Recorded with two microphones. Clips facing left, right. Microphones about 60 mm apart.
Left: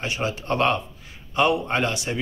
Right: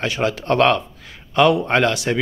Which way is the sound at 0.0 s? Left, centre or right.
Right.